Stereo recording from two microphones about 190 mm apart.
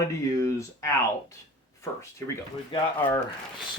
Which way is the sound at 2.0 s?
15° left (ahead or behind).